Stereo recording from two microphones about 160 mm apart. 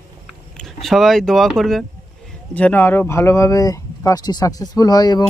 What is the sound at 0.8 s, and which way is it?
Speech, centre (ahead or behind).